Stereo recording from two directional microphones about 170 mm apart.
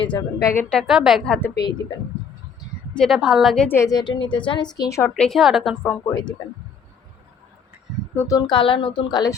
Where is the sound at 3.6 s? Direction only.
15° left (ahead or behind).